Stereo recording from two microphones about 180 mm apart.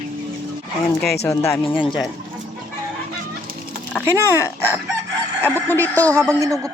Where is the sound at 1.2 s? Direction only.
15° left (ahead or behind).